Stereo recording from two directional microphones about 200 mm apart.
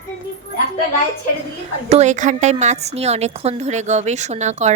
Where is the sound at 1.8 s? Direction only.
35° right (ahead or behind).